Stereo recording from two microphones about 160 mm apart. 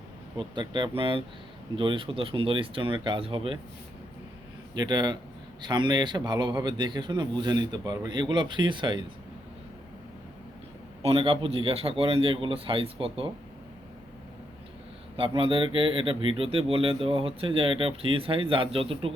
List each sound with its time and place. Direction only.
0.3 s a man's voice: 30° right (ahead or behind)
4.7 s a man's voice: 25° right (ahead or behind)
11.0 s speech: 35° right (ahead or behind)
15.4 s speech: 35° right (ahead or behind)